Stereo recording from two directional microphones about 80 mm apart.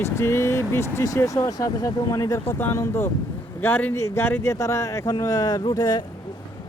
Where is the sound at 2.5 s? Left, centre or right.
Left.